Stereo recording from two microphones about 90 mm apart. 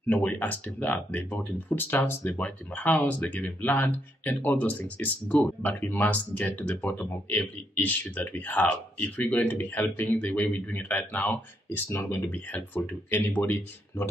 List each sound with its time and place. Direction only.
0.1 s speech: 20° left (ahead or behind)